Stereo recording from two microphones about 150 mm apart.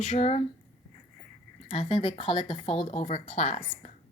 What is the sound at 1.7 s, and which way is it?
Speech, 40° left (ahead or behind).